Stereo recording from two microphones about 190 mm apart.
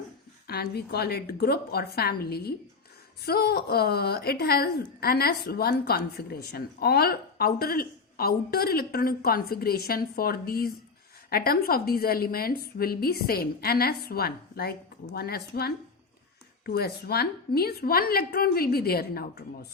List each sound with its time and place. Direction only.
0.4 s a woman's voice: 55° left (ahead or behind)